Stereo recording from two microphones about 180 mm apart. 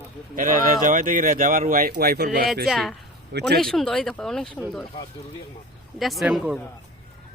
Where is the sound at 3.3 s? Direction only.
70° right (ahead or behind).